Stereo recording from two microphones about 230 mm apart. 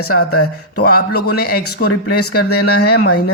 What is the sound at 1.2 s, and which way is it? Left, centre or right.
Speech, left.